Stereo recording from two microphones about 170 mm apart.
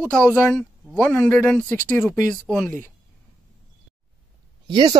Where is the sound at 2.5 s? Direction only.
10° right (ahead or behind).